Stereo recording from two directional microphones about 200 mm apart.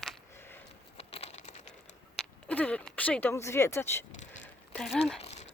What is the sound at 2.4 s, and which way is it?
Speech, 5° left (ahead or behind).